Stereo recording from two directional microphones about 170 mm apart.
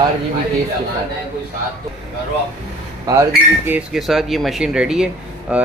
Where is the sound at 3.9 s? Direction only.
Centre (ahead or behind).